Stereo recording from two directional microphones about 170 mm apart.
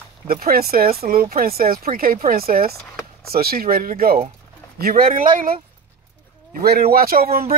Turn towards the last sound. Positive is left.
turn(degrees=-60)  # may be behind; listen again after turning